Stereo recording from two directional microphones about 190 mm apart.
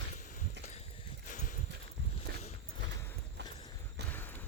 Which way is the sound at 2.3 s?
60° right (ahead or behind).